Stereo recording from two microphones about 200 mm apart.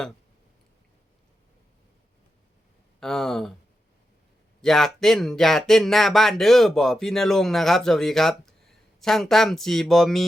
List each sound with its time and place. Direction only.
3.0 s speech: centre (ahead or behind)
4.6 s speech: centre (ahead or behind)